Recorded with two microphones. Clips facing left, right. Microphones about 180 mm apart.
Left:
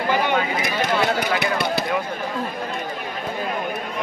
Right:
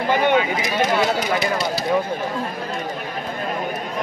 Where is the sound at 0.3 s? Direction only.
55° left (ahead or behind).